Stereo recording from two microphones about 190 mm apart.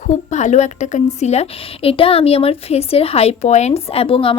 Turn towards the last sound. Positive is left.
turn(degrees=30)  # may be behind; listen again after turning